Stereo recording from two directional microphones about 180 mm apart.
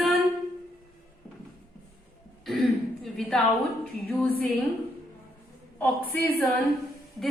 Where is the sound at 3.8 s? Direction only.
5° left (ahead or behind).